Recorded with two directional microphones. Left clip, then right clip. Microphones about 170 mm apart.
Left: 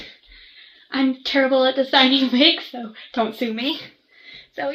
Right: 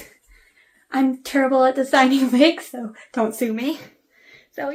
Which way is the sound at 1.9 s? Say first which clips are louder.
Even; 45° right (ahead or behind).